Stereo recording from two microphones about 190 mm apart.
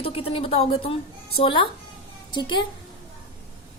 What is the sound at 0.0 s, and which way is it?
A woman's voice, 30° left (ahead or behind).